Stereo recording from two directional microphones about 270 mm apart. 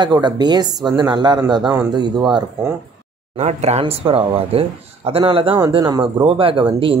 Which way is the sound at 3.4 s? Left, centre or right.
Right.